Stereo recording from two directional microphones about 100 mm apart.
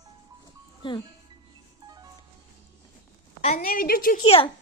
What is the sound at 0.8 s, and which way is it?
Speech, 55° left (ahead or behind).